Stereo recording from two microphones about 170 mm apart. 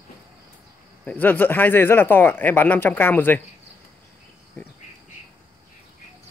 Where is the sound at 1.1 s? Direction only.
10° left (ahead or behind).